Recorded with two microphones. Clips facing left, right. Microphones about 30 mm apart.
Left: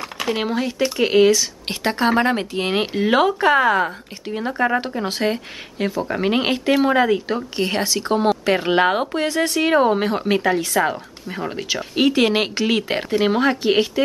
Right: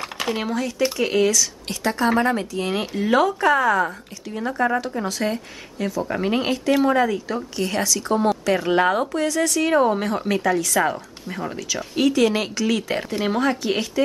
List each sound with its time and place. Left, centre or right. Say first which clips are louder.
0.3 s a woman's voice: left 3 dB; left
10.7 s speech: left 1 dB; centre
11.5 s a woman's voice: left 4 dB; left